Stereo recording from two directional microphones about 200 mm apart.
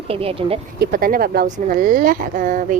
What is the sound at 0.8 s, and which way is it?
Speech, 45° right (ahead or behind).